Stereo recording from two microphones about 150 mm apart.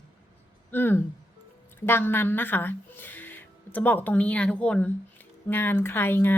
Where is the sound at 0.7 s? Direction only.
15° left (ahead or behind).